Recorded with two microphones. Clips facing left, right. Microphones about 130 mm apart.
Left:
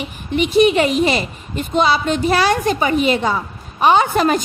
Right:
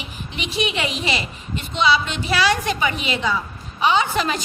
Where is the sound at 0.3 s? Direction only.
50° left (ahead or behind).